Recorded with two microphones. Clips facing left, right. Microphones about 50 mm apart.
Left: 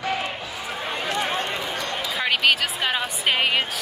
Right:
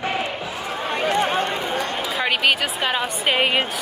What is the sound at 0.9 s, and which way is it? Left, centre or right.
Run, right.